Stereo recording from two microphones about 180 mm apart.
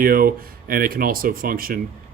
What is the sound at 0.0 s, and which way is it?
Speech, 55° right (ahead or behind).